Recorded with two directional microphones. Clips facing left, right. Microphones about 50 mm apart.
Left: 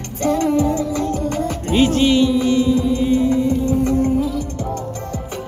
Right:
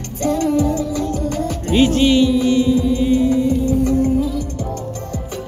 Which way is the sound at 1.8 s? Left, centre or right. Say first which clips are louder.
Right 1 dB; left.